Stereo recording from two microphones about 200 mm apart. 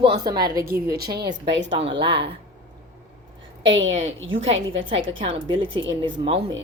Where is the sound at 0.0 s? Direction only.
25° right (ahead or behind).